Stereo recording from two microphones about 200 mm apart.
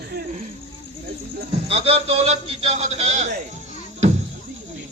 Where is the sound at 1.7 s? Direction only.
30° right (ahead or behind).